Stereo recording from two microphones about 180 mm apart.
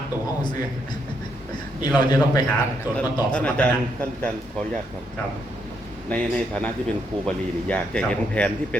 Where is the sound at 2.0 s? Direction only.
25° left (ahead or behind).